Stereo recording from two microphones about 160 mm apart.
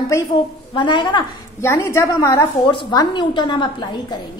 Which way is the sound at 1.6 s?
15° left (ahead or behind).